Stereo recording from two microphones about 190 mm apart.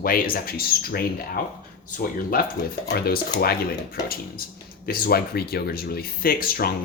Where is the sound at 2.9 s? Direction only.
55° left (ahead or behind).